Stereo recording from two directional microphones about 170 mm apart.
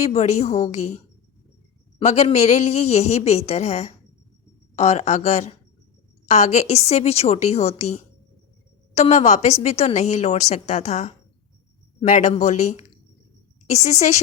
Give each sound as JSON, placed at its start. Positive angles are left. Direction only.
{"t": 0.0, "sound": "speech", "side_deg": 40}
{"t": 2.0, "sound": "speech", "side_deg": 40}